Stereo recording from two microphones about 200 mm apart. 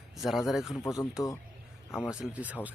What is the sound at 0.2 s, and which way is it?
Speech, centre (ahead or behind).